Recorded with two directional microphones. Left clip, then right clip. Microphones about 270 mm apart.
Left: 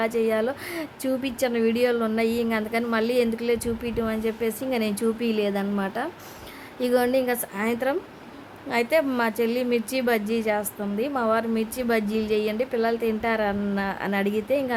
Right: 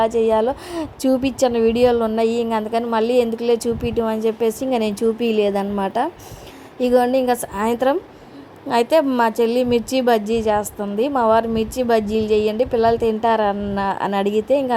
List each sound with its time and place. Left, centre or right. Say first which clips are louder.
0.0 s a woman's voice: right 7 dB; centre